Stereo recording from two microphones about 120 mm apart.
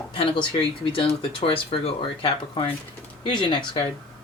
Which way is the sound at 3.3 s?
40° left (ahead or behind).